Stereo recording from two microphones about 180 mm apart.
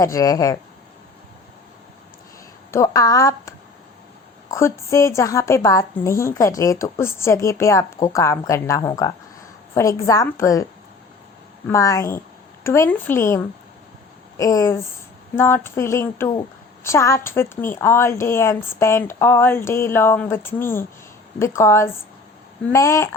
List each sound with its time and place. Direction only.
0.0 s speech: 20° left (ahead or behind)
2.7 s a woman's voice: 20° left (ahead or behind)
11.7 s a woman's voice: 20° left (ahead or behind)